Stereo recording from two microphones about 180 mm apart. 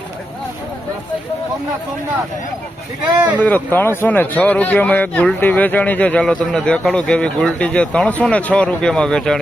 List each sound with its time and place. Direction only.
3.4 s speech: 10° left (ahead or behind)